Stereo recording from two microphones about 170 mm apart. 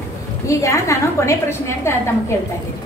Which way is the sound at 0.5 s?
20° left (ahead or behind).